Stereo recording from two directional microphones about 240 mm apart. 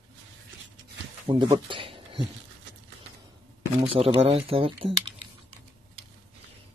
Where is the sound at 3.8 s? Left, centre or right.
Right.